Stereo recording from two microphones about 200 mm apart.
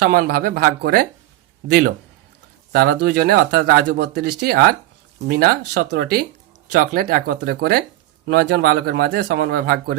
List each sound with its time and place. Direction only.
0.0 s speech: 45° right (ahead or behind)
2.7 s speech: 50° right (ahead or behind)